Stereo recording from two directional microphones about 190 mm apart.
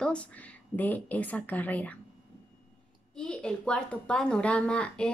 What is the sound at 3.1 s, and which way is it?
A woman's voice, 5° left (ahead or behind).